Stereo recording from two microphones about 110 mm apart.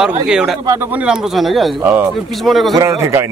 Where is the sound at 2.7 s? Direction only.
25° right (ahead or behind).